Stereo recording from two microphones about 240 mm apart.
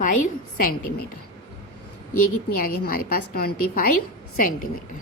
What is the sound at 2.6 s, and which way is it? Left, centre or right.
A woman's voice, left.